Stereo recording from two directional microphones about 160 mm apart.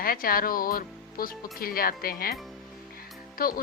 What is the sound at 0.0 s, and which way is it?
Speech, 65° left (ahead or behind).